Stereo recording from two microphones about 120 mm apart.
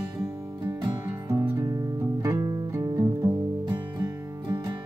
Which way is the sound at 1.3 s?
25° right (ahead or behind).